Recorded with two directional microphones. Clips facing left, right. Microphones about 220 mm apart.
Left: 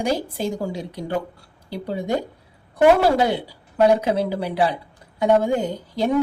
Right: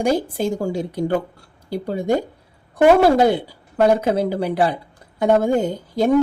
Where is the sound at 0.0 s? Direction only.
50° right (ahead or behind).